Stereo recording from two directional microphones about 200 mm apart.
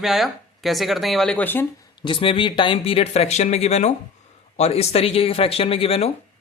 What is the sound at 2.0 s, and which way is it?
Speech, 25° left (ahead or behind).